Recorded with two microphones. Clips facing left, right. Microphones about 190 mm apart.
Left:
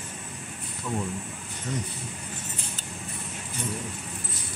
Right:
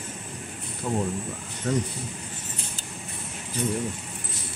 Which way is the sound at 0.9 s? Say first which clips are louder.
Right 4 dB; 35° right (ahead or behind).